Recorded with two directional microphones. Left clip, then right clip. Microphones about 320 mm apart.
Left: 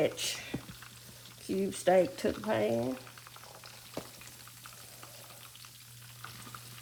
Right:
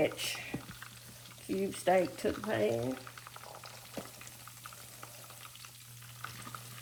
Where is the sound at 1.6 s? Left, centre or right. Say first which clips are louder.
Left 3 dB; left.